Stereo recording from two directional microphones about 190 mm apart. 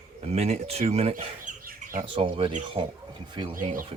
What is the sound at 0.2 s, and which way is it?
Speech, 35° right (ahead or behind).